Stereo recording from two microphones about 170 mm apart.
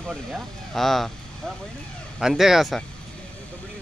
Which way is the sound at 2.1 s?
Centre (ahead or behind).